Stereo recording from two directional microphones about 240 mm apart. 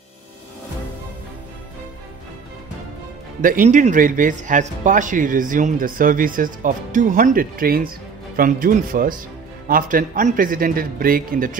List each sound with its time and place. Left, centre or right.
3.4 s speech: right